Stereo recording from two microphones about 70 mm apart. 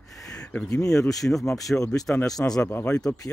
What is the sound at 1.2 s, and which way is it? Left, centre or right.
Speech, centre.